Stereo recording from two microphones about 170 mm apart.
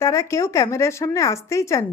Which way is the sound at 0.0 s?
15° left (ahead or behind).